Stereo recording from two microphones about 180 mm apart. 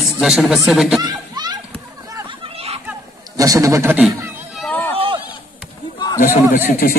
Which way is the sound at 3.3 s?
20° right (ahead or behind).